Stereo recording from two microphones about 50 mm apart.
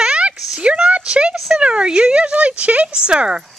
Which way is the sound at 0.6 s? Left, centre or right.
Right.